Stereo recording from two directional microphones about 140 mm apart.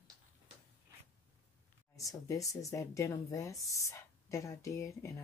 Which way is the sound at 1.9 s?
25° left (ahead or behind).